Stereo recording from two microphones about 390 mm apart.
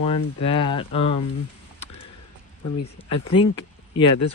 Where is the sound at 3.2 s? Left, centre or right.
Centre.